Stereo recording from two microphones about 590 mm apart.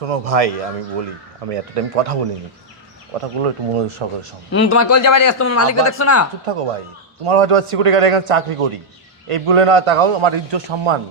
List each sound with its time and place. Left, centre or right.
0.0 s speech: right
3.4 s a man's voice: right
4.5 s speech: left
6.4 s a man's voice: right